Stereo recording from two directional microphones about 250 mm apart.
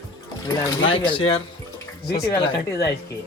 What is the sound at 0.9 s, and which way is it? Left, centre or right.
Speech, left.